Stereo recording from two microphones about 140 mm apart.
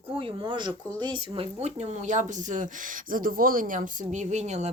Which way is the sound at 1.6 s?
55° right (ahead or behind).